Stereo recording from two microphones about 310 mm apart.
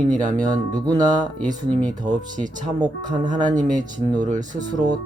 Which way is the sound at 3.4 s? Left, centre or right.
Right.